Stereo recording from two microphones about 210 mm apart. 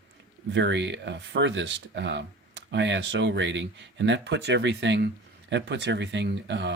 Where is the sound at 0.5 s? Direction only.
55° right (ahead or behind).